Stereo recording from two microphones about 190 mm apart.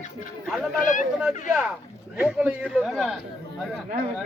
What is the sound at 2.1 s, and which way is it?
Speech, 5° right (ahead or behind).